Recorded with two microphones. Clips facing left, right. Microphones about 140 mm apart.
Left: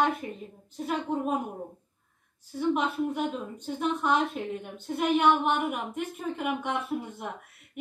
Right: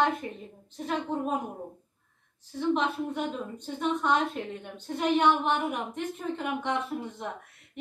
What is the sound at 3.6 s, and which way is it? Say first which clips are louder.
A woman's voice: even; 5° left (ahead or behind).